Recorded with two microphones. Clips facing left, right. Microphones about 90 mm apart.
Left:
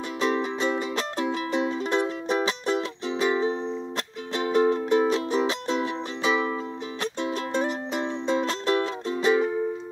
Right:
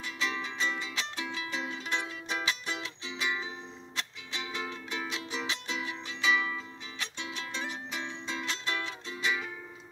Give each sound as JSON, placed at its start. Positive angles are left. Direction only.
{"t": 0.2, "sound": "music", "side_deg": 45}